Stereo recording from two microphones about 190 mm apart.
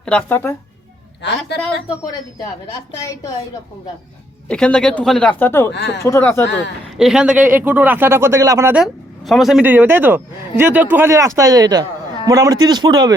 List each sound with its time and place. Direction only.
0.0 s speech: 5° left (ahead or behind)
1.2 s a woman's voice: 65° left (ahead or behind)
3.0 s speech: 15° left (ahead or behind)
4.4 s speech: 5° left (ahead or behind)
6.9 s speech: centre (ahead or behind)
8.8 s a man's voice: centre (ahead or behind); by 13.1 s 20° right (ahead or behind)